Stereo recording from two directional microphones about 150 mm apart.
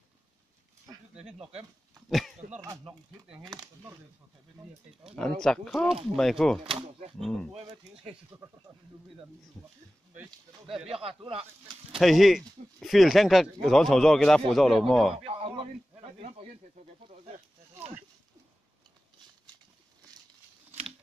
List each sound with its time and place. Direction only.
1.1 s speech: 5° right (ahead or behind)
5.4 s speech: 5° left (ahead or behind)
6.6 s speech: 40° right (ahead or behind)
7.2 s speech: centre (ahead or behind)
7.6 s speech: 40° right (ahead or behind)
8.3 s speech: 20° right (ahead or behind)
10.7 s speech: 40° right (ahead or behind)
12.0 s speech: centre (ahead or behind)
15.2 s speech: 40° right (ahead or behind)